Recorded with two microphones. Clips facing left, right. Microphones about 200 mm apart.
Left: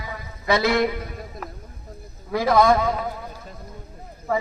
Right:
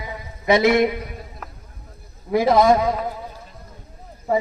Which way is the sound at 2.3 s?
20° right (ahead or behind).